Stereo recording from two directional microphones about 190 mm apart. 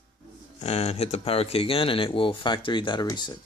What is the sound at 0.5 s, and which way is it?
Speech, 35° left (ahead or behind).